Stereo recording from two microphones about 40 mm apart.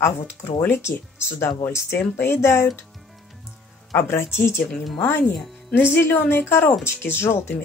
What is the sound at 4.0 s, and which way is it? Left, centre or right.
Speech, left.